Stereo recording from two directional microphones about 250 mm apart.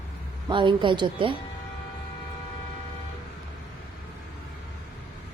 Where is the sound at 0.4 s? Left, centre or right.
Centre.